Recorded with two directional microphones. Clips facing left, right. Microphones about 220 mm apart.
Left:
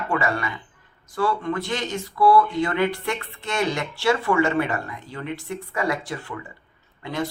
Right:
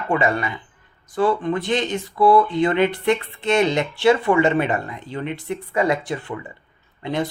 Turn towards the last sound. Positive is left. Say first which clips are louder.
# right 4 dB
turn(degrees=-20)  # may be behind; listen again after turning